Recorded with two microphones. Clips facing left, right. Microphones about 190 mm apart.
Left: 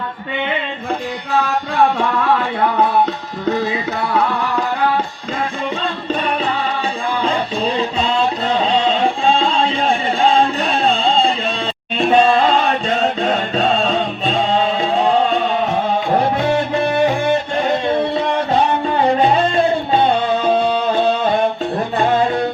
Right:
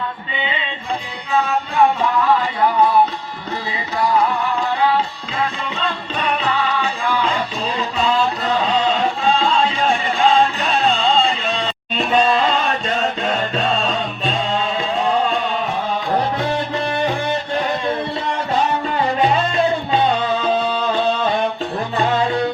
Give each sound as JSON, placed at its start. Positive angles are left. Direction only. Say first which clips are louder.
{"t": 1.7, "sound": "music", "louder": "even", "side_deg": 65}
{"t": 7.2, "sound": "music", "louder": "left 3 dB", "side_deg": 30}
{"t": 10.2, "sound": "music", "louder": "even", "side_deg": 30}